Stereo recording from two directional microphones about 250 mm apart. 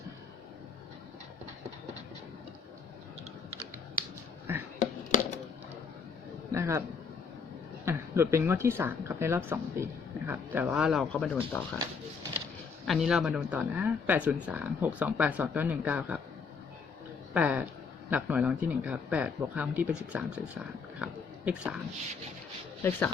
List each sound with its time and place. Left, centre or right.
4.8 s a sound: left
6.5 s a sound: centre
7.9 s speech: centre
12.9 s speech: centre
17.3 s a woman's voice: centre
22.8 s speech: centre